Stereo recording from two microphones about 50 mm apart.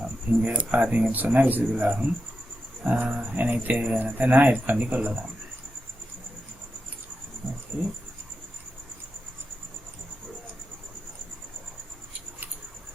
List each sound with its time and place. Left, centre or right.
0.4 s speech: right
7.7 s speech: right